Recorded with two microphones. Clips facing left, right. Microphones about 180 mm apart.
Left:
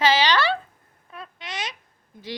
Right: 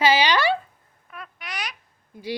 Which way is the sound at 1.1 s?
25° left (ahead or behind).